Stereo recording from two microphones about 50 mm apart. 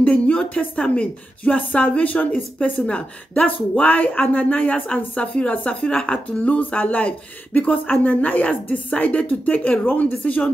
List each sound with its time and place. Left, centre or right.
0.0 s speech: left